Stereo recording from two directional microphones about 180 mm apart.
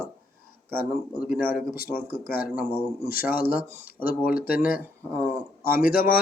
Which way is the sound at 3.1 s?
55° left (ahead or behind).